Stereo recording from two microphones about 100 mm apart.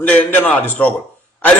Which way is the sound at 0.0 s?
20° left (ahead or behind).